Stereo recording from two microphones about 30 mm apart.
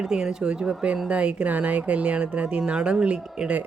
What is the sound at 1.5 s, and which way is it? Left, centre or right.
Speech, right.